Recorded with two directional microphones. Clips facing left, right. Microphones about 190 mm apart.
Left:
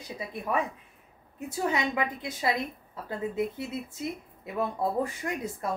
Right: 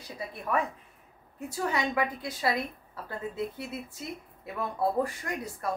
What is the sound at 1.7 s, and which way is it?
A woman's voice, 20° left (ahead or behind).